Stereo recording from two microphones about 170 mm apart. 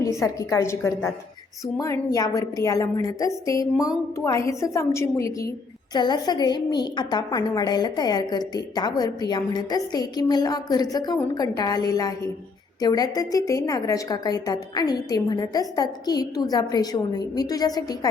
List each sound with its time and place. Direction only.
0.0 s a woman's voice: 20° left (ahead or behind)